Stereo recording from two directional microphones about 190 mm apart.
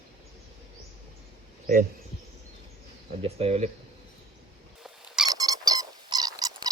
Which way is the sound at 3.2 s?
35° right (ahead or behind).